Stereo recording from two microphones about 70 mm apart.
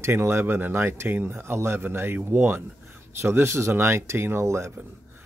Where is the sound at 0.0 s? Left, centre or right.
Right.